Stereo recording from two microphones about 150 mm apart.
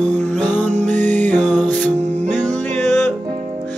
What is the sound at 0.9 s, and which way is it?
Music, 55° right (ahead or behind).